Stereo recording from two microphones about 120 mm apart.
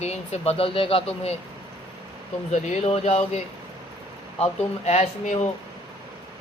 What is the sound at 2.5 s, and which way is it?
Speech, 65° left (ahead or behind).